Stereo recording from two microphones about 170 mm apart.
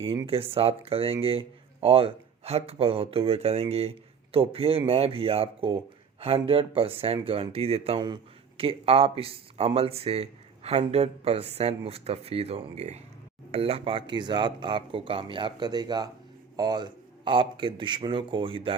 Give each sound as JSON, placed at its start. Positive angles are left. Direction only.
{"t": 0.0, "sound": "speech", "side_deg": -30}